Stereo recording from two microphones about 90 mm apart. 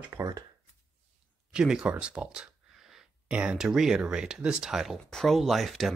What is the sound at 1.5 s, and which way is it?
Speech, 10° right (ahead or behind).